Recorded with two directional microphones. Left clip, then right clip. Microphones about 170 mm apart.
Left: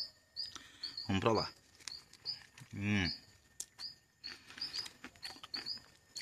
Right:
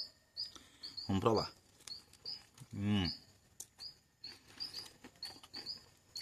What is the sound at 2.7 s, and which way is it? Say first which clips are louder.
Speech: left 2 dB; 20° right (ahead or behind).